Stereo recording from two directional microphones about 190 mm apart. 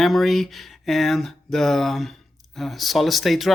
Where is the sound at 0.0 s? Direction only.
Centre (ahead or behind).